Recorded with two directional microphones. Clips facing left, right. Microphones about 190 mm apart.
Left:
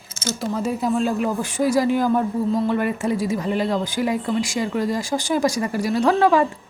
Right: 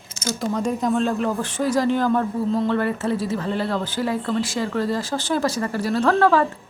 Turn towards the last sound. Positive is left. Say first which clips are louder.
# left 1 dB
turn(degrees=15)  # may be behind; listen again after turning